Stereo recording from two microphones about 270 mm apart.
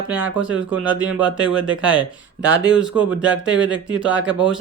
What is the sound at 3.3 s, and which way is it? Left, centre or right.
Speech, right.